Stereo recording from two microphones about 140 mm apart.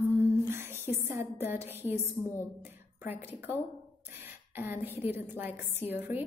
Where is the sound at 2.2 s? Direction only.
15° left (ahead or behind).